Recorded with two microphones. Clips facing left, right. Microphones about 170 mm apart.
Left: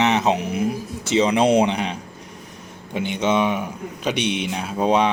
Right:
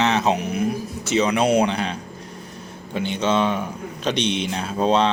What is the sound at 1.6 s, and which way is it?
Speech, 15° left (ahead or behind).